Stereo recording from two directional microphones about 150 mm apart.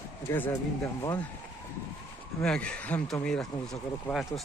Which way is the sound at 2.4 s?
5° left (ahead or behind).